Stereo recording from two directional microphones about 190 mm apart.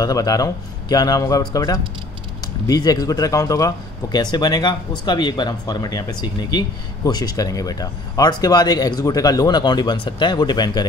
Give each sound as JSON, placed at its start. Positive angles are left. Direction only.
{"t": 0.0, "sound": "speech", "side_deg": 20}